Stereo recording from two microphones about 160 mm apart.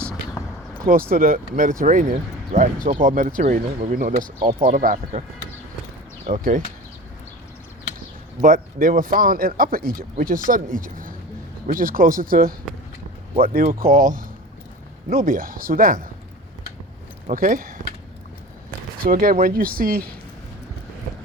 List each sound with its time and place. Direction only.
1.1 s speech: 60° right (ahead or behind)
6.2 s speech: 55° right (ahead or behind)
8.4 s speech: 60° right (ahead or behind)
17.2 s speech: 60° right (ahead or behind)
19.0 s speech: 65° right (ahead or behind)